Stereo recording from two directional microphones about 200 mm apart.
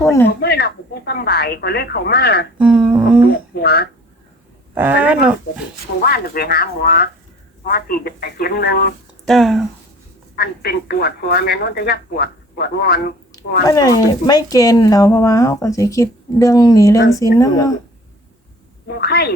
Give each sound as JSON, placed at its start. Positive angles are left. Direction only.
{"t": 0.0, "sound": "speech", "side_deg": 15}
{"t": 0.3, "sound": "speech", "side_deg": 55}
{"t": 2.6, "sound": "humming", "side_deg": -5}
{"t": 3.5, "sound": "a sound", "side_deg": 50}
{"t": 4.7, "sound": "a sound", "side_deg": -10}
{"t": 6.1, "sound": "speech", "side_deg": 50}
{"t": 9.2, "sound": "speech", "side_deg": 0}
{"t": 10.3, "sound": "speech", "side_deg": 50}
{"t": 13.7, "sound": "speech", "side_deg": 20}
{"t": 18.9, "sound": "speech", "side_deg": 55}